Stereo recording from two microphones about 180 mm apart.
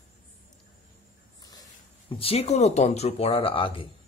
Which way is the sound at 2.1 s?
35° left (ahead or behind).